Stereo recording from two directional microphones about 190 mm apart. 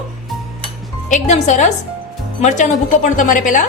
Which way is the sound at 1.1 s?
40° left (ahead or behind).